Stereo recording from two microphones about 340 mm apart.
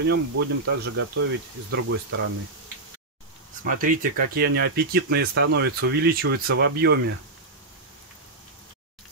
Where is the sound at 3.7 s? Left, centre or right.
Right.